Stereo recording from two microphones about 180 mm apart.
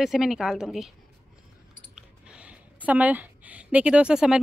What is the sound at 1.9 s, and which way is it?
Speech, 5° right (ahead or behind).